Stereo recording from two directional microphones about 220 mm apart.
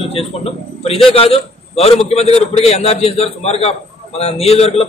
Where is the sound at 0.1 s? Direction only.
25° left (ahead or behind).